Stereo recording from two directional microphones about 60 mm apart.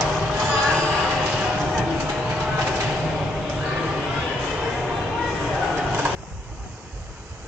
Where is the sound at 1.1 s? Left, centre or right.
Centre.